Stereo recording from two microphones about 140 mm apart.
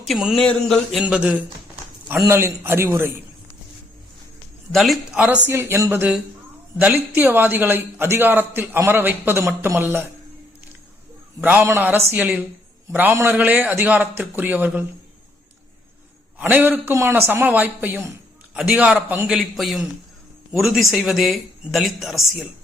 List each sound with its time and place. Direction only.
0.0 s a sound: centre (ahead or behind)
0.4 s a man's voice: centre (ahead or behind)
2.0 s a man's voice: 20° right (ahead or behind)
4.7 s a man's voice: centre (ahead or behind)
5.2 s a man's voice: 15° right (ahead or behind)
11.3 s a man's voice: 15° right (ahead or behind)
16.4 s a man's voice: 15° right (ahead or behind)
19.3 s a man's voice: centre (ahead or behind)